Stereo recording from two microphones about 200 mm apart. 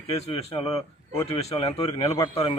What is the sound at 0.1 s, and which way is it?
Speech, 30° left (ahead or behind).